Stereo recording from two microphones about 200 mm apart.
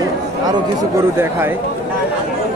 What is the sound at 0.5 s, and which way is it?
Speech, 15° right (ahead or behind).